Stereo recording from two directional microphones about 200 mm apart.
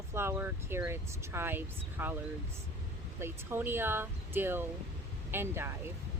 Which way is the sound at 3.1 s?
10° right (ahead or behind).